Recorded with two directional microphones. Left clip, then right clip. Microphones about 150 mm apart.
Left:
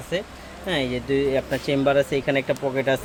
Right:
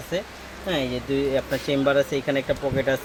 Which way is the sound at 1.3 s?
30° left (ahead or behind).